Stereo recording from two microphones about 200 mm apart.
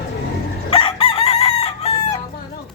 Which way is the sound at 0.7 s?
25° left (ahead or behind).